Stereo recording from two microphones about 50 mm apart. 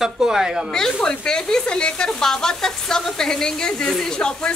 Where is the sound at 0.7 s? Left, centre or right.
Centre.